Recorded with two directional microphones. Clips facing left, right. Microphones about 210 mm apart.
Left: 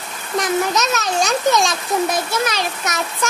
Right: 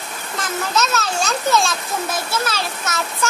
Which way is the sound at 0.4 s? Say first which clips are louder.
Left 4 dB; 15° left (ahead or behind).